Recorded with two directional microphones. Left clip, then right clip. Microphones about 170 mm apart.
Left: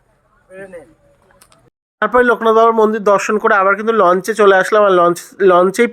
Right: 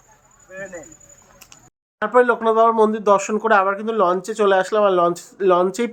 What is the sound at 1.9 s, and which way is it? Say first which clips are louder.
Speech: left 4 dB; 30° left (ahead or behind).